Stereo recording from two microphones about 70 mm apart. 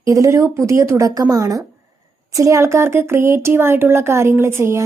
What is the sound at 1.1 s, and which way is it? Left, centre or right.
A woman's voice, right.